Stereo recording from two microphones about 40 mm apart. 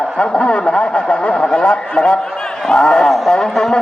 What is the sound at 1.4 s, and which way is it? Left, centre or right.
A man's voice, left.